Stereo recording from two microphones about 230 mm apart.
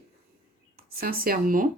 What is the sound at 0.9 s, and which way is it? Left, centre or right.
Speech, right.